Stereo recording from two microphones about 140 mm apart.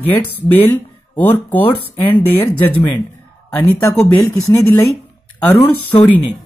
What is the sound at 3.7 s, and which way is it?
Speech, 5° left (ahead or behind).